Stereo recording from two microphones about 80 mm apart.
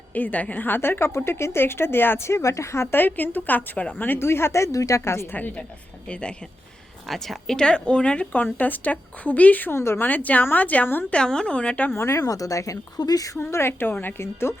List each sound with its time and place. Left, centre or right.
0.1 s a woman's voice: centre
5.4 s a woman's voice: centre
9.7 s a woman's voice: left
10.1 s a woman's voice: left
11.1 s a woman's voice: centre
11.9 s a woman's voice: left
12.2 s speech: left
13.4 s a woman's voice: left